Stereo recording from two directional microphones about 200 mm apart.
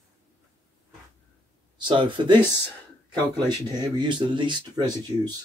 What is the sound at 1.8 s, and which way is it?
Speech, 25° right (ahead or behind).